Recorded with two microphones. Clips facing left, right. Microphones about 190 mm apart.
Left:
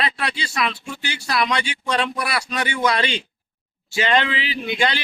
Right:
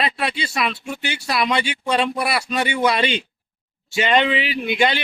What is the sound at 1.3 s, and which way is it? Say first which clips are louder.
Speech: right 1 dB; 5° right (ahead or behind).